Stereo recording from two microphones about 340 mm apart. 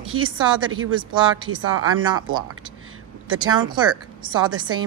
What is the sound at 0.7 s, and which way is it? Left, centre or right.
Speech, right.